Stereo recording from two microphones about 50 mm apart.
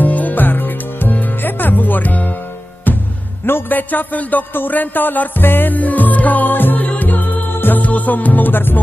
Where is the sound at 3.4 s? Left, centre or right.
Left.